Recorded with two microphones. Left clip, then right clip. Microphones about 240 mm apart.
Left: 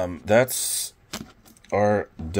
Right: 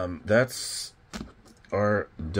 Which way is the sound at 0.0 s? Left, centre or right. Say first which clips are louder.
Left 4 dB; left.